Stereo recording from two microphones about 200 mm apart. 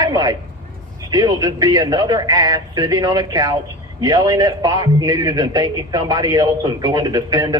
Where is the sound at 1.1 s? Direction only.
20° right (ahead or behind).